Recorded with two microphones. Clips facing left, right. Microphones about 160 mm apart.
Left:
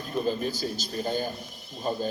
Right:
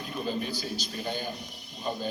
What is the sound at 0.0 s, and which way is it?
A man's voice, 40° left (ahead or behind).